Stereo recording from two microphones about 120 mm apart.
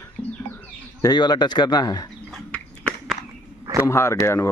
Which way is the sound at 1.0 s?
35° left (ahead or behind).